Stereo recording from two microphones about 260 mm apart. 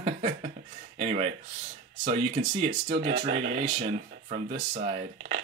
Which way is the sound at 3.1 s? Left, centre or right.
Right.